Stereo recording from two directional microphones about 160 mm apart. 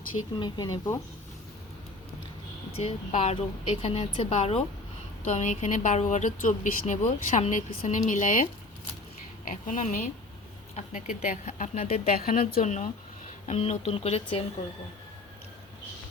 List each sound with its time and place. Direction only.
0.3 s speech: 25° left (ahead or behind)
2.7 s a woman's voice: 45° left (ahead or behind)
5.2 s speech: 50° left (ahead or behind)
12.0 s a woman's voice: 65° left (ahead or behind)
12.6 s a woman's voice: 50° left (ahead or behind)